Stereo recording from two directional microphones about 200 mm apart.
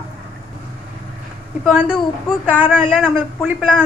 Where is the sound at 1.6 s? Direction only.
Centre (ahead or behind).